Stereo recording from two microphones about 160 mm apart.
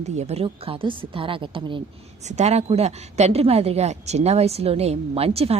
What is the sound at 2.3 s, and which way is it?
A woman's voice, 45° right (ahead or behind).